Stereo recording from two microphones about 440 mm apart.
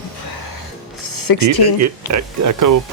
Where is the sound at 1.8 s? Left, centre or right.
Right.